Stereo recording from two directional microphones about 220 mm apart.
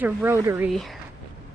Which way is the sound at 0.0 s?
15° right (ahead or behind).